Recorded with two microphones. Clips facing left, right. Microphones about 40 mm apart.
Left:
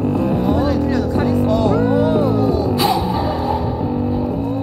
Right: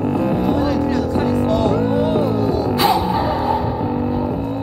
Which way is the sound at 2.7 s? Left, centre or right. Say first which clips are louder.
Right 1 dB; right.